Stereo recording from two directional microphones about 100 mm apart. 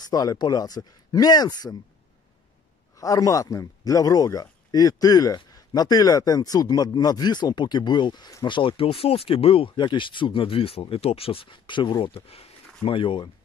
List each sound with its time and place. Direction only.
0.0 s speech: 40° left (ahead or behind)
3.0 s speech: 35° left (ahead or behind)
8.5 s speech: 55° left (ahead or behind); by 12.5 s 75° left (ahead or behind)
12.8 s speech: 60° left (ahead or behind)